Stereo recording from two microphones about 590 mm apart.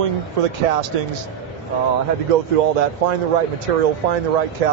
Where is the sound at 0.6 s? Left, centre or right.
Right.